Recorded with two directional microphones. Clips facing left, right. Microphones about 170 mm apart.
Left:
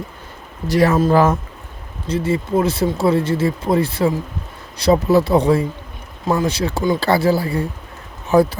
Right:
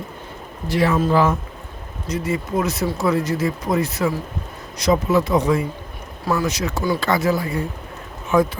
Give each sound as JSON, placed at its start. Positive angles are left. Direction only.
{"t": 0.7, "sound": "speech", "side_deg": 40}
{"t": 2.0, "sound": "speech", "side_deg": 30}